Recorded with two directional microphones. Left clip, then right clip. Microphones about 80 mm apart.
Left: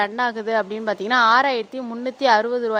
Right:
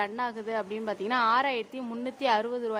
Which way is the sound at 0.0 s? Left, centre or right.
Left.